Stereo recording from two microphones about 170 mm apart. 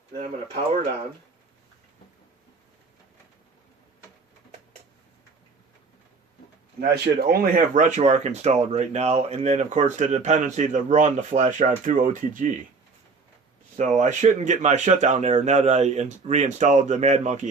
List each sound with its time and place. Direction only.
6.7 s speech: 70° right (ahead or behind); by 12.5 s 50° right (ahead or behind)
13.7 s speech: 45° right (ahead or behind)